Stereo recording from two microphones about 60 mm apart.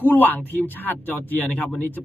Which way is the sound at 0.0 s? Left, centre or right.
Left.